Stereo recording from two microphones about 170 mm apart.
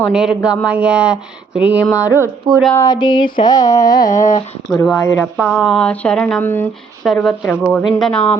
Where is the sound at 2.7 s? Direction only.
20° left (ahead or behind).